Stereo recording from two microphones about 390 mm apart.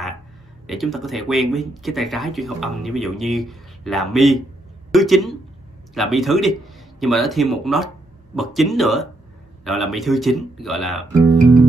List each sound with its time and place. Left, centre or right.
0.7 s speech: centre